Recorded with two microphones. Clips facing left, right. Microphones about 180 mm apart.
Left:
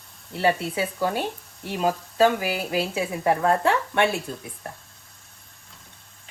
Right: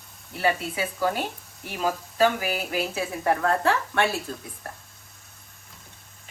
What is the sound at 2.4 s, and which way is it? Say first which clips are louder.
A woman's voice: left 2 dB; 25° left (ahead or behind).